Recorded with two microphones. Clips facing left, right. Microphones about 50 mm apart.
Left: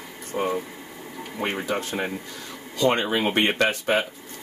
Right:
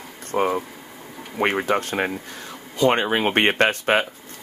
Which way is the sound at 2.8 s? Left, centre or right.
Right.